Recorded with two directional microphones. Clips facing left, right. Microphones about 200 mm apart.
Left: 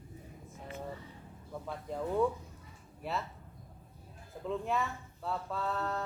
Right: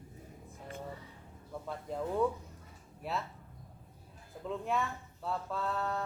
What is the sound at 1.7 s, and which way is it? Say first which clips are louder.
Speech: left 1 dB; centre (ahead or behind).